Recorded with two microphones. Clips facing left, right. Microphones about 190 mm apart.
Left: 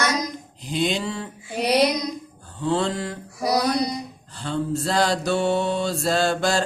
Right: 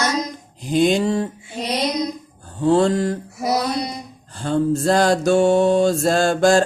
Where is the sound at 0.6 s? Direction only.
45° right (ahead or behind).